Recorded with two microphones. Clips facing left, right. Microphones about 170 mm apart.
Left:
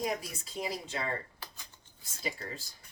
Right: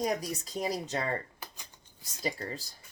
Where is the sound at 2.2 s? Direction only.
40° right (ahead or behind).